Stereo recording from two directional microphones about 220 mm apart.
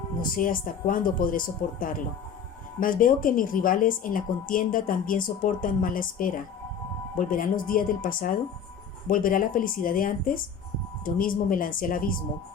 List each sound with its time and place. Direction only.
0.2 s a woman's voice: 40° left (ahead or behind)